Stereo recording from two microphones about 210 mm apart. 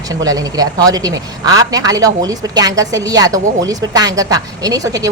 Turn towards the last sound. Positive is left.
turn(degrees=-15)  # may be behind; listen again after turning